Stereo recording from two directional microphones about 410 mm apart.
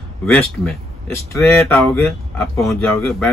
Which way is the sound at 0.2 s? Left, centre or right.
Centre.